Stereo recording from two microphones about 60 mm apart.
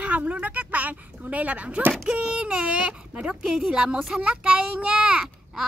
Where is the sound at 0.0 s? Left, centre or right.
Right.